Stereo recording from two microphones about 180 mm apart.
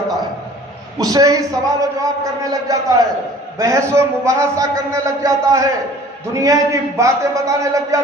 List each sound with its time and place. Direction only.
0.9 s a man's voice: 20° right (ahead or behind)